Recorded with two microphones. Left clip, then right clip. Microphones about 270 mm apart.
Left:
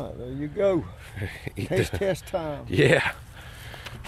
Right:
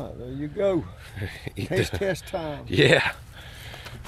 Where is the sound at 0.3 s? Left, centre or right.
Centre.